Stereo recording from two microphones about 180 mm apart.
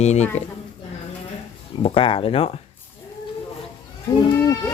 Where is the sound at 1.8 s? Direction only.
30° left (ahead or behind).